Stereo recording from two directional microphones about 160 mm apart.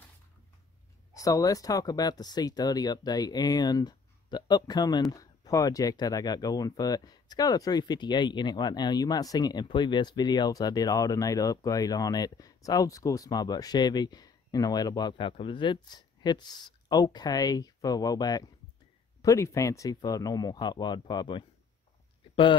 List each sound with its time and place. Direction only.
1.1 s speech: 20° left (ahead or behind)